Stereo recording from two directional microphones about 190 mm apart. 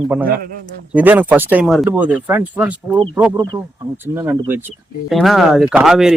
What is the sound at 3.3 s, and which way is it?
Speech, 25° right (ahead or behind).